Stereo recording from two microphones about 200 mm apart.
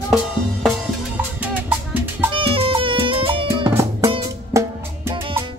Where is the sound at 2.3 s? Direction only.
25° right (ahead or behind).